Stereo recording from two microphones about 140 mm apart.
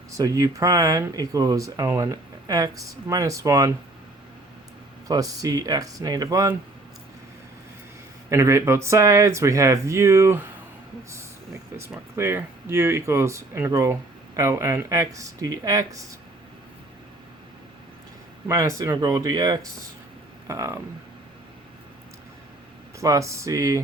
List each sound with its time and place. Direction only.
0.1 s speech: 25° right (ahead or behind)
5.0 s speech: 25° right (ahead or behind)
8.3 s speech: 20° right (ahead or behind)
11.8 s speech: 20° right (ahead or behind)
18.4 s speech: 25° right (ahead or behind)
23.0 s speech: 25° right (ahead or behind)